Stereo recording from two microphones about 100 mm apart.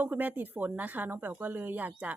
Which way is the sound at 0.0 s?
20° right (ahead or behind).